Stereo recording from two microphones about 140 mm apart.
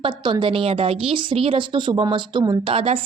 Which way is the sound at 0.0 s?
35° right (ahead or behind).